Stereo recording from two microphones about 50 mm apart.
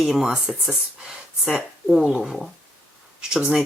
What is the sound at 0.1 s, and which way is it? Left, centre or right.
Speech, centre.